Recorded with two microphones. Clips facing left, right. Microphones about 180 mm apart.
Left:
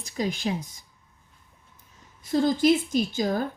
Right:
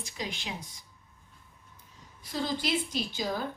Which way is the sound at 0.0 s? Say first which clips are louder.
Left 10 dB; 45° left (ahead or behind).